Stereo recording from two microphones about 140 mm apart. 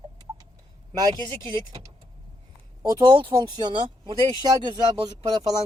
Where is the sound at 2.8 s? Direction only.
25° right (ahead or behind).